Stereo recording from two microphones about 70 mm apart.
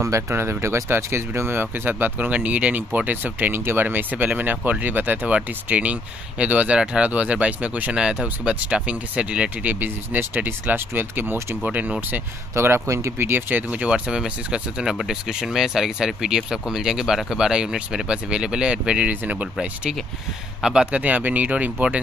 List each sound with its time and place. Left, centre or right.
0.0 s speech: right
11.6 s speech: centre
12.5 s speech: right; by 21.0 s centre
21.0 s speech: right